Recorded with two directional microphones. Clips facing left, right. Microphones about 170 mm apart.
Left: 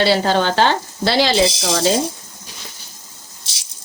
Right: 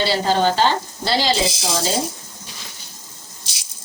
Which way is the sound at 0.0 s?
65° left (ahead or behind).